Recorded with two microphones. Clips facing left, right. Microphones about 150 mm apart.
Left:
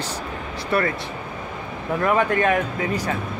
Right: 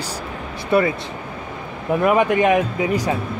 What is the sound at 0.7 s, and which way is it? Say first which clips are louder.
Speech: right 5 dB; 15° right (ahead or behind).